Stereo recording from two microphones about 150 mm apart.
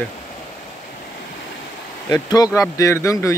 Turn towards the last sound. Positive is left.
turn(degrees=20)  # may be behind; listen again after turning